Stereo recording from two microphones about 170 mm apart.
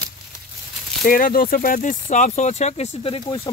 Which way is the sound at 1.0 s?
55° left (ahead or behind).